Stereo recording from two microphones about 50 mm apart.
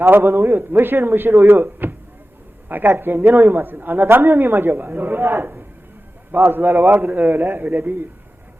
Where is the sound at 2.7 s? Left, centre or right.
Right.